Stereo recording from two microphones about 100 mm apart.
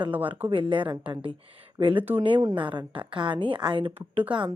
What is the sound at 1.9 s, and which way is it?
Speech, 20° right (ahead or behind).